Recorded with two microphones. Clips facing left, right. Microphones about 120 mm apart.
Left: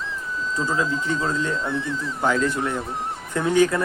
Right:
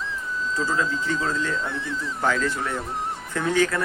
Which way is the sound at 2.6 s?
Centre (ahead or behind).